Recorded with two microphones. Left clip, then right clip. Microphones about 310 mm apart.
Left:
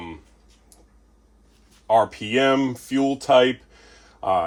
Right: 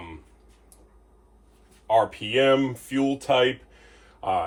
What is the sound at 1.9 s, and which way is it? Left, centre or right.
Speech, left.